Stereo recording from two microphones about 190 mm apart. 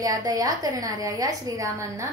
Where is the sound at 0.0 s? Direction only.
20° right (ahead or behind).